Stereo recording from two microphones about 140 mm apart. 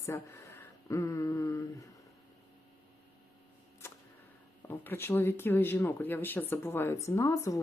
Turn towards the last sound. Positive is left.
turn(degrees=20)  # may be behind; listen again after turning